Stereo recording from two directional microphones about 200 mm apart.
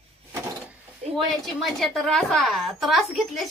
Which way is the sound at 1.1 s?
Centre (ahead or behind).